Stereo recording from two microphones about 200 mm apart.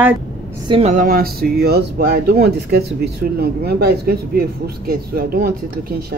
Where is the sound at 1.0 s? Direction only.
50° right (ahead or behind).